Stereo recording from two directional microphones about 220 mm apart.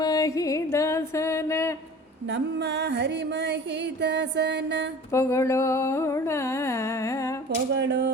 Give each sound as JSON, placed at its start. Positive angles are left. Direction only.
{"t": 0.0, "sound": "music", "side_deg": 15}
{"t": 2.3, "sound": "music", "side_deg": -50}
{"t": 5.1, "sound": "a sound", "side_deg": 15}
{"t": 7.8, "sound": "music", "side_deg": -50}